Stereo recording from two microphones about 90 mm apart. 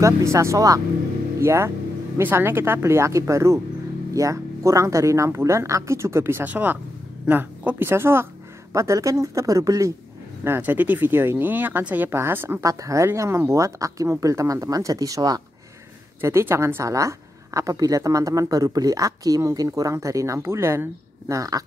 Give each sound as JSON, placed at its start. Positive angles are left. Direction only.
{"t": 0.0, "sound": "speech", "side_deg": -30}
{"t": 10.4, "sound": "speech", "side_deg": -25}
{"t": 12.6, "sound": "speech", "side_deg": -35}
{"t": 16.2, "sound": "speech", "side_deg": -30}